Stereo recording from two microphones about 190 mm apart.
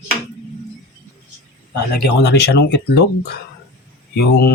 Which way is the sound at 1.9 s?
60° left (ahead or behind).